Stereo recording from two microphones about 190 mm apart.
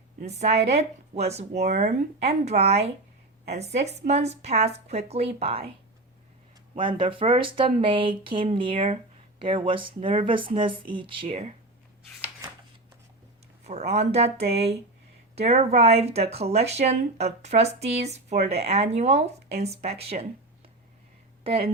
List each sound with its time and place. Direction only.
0.2 s speech: 35° right (ahead or behind)
6.7 s speech: 25° right (ahead or behind)
13.7 s speech: 35° right (ahead or behind)
21.4 s speech: 30° right (ahead or behind)